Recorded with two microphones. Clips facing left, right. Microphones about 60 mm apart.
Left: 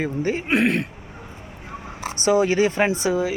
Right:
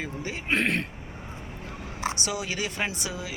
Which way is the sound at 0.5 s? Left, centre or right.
Centre.